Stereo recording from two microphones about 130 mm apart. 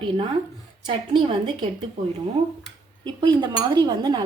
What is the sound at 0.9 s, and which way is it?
Speech, 40° right (ahead or behind).